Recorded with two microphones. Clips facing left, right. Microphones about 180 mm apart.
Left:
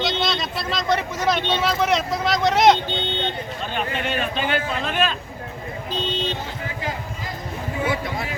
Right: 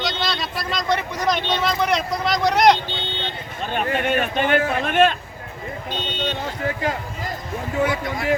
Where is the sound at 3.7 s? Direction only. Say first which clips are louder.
Right 5 dB; 50° right (ahead or behind).